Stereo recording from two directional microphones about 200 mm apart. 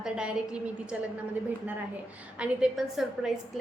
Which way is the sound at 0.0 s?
5° right (ahead or behind).